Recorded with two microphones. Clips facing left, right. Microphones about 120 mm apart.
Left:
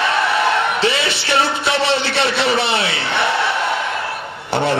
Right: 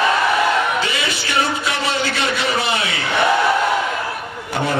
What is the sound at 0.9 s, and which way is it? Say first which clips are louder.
Music: left 3 dB; 30° left (ahead or behind).